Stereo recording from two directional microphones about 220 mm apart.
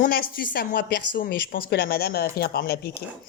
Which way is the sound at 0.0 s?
40° left (ahead or behind).